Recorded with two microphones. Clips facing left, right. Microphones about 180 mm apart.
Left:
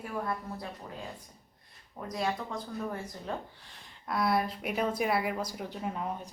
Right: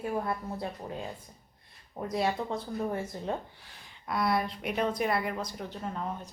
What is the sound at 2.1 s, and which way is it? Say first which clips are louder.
Speech: right 3 dB; 30° right (ahead or behind).